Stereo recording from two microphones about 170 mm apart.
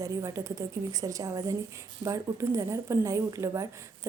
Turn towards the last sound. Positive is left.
turn(degrees=-15)  # may be behind; listen again after turning